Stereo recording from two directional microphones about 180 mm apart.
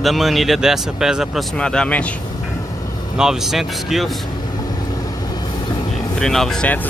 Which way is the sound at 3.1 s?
5° right (ahead or behind).